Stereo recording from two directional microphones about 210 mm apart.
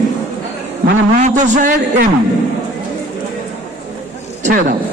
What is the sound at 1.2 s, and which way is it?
Speech, 35° right (ahead or behind).